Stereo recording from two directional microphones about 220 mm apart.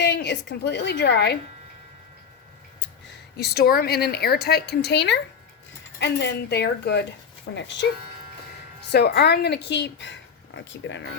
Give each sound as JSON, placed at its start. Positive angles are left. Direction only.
{"t": 0.0, "sound": "a woman's voice", "side_deg": 50}
{"t": 3.3, "sound": "speech", "side_deg": 45}
{"t": 8.9, "sound": "speech", "side_deg": 50}